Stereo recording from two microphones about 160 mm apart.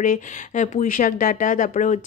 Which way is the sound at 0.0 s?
55° left (ahead or behind).